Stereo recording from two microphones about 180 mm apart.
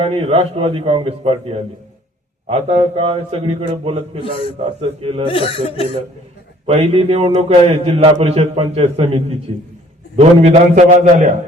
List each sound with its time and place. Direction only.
0.0 s a man's voice: 35° right (ahead or behind)
5.2 s speech: 30° left (ahead or behind)
6.7 s a man's voice: 35° right (ahead or behind)